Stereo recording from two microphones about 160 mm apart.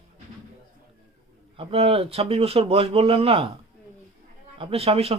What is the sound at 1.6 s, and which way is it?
Speech, 35° right (ahead or behind).